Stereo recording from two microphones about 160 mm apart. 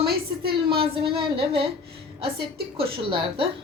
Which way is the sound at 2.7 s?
35° right (ahead or behind).